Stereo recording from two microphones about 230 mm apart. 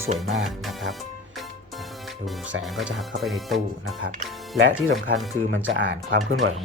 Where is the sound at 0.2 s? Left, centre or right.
Centre.